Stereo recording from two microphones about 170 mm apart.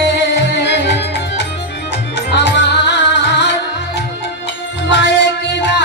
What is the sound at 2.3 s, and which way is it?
Music, 90° left.